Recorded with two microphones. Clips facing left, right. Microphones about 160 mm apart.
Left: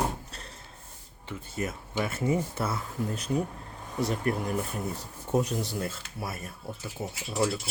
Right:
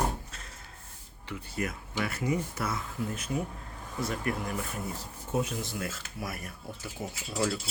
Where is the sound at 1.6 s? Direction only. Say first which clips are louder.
Left 2 dB; 25° left (ahead or behind).